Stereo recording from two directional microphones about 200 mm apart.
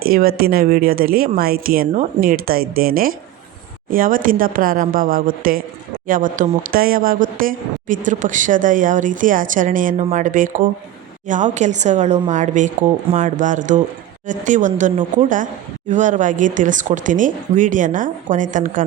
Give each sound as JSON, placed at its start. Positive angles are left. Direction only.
{"t": 0.0, "sound": "a woman's voice", "side_deg": -45}